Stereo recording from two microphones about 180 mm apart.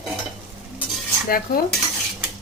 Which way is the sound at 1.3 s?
55° left (ahead or behind).